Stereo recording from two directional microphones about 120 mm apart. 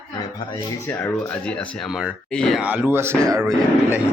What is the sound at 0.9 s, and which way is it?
Speech, 10° left (ahead or behind).